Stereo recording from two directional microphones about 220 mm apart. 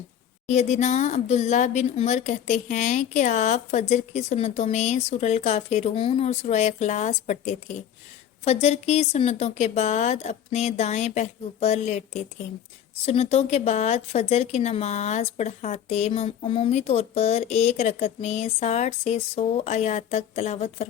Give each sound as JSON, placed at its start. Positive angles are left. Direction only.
{"t": 0.4, "sound": "speech", "side_deg": 30}